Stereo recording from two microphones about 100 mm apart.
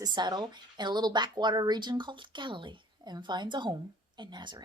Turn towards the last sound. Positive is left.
turn(degrees=-45)  # may be behind; listen again after turning